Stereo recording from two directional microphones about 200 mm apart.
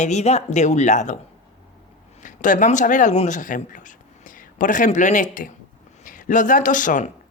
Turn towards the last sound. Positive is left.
turn(degrees=40)  # may be behind; listen again after turning